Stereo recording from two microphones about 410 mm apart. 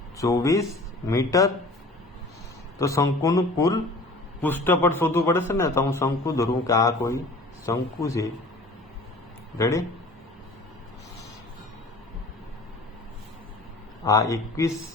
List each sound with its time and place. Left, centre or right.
0.2 s speech: centre
2.7 s speech: centre
9.6 s speech: centre
14.0 s speech: centre